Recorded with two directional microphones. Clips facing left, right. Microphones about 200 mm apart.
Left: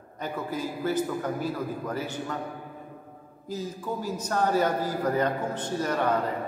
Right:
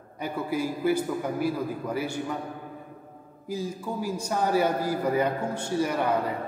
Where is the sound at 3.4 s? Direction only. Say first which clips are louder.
Right 1 dB; 10° right (ahead or behind).